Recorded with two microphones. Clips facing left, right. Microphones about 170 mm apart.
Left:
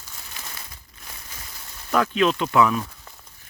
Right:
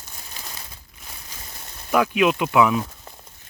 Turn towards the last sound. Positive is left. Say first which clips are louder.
# right 2 dB
turn(degrees=-20)  # may be behind; listen again after turning